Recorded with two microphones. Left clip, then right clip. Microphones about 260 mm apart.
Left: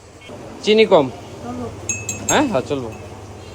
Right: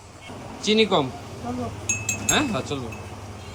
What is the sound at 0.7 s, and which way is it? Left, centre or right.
Speech, centre.